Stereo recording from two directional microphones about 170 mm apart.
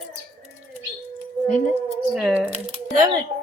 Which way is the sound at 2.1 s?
5° right (ahead or behind).